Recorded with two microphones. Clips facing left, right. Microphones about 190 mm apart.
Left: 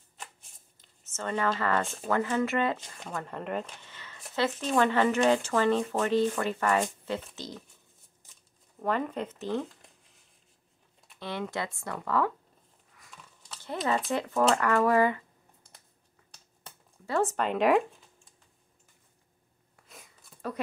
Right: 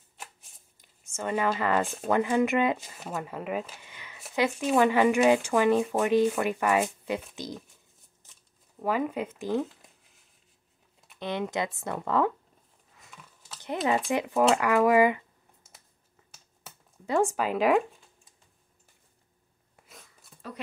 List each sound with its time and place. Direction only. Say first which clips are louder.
0.2 s shuffling cards: even; 10° right (ahead or behind)
2.0 s speech: right 4 dB; 15° right (ahead or behind)
8.7 s speech: right 2 dB; 5° right (ahead or behind)
11.1 s speech: right 4 dB; 20° right (ahead or behind)
13.4 s a sound: even; 5° right (ahead or behind)
14.1 s speech: right 2 dB; 10° right (ahead or behind)
17.0 s speech: right 2 dB; 15° right (ahead or behind)